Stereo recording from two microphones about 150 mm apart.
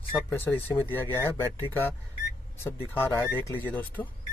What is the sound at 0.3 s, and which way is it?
Speech, 15° left (ahead or behind).